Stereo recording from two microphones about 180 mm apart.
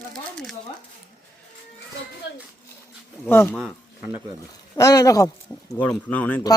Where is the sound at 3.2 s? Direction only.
10° left (ahead or behind).